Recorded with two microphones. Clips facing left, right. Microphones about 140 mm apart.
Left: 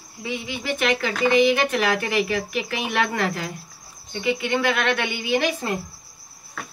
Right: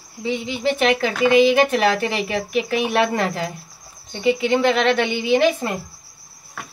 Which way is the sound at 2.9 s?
30° right (ahead or behind).